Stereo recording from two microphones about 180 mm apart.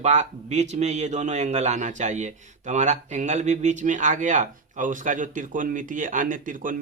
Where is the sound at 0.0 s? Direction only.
40° right (ahead or behind).